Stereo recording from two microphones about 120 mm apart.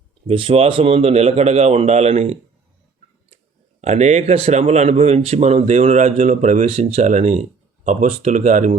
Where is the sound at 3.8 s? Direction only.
70° right (ahead or behind).